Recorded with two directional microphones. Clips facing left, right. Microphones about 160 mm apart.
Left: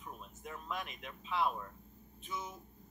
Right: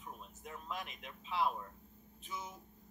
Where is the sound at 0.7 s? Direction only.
30° right (ahead or behind).